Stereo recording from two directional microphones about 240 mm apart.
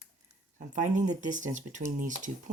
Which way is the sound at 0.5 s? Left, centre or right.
Right.